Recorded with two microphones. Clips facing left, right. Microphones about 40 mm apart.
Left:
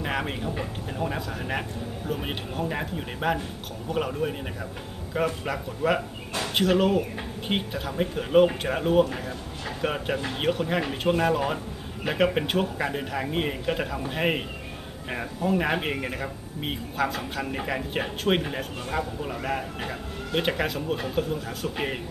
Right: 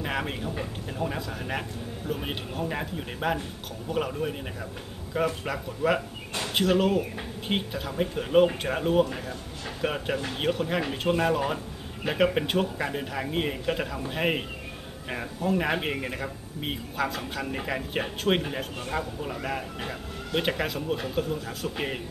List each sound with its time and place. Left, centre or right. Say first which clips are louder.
0.0 s speech: left 2 dB; centre